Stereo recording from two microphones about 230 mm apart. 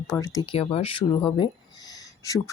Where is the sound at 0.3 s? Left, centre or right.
Left.